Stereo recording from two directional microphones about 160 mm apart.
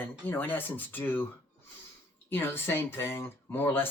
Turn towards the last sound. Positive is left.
turn(degrees=15)  # may be behind; listen again after turning